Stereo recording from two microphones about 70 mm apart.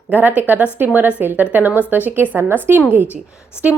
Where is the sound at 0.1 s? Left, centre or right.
Right.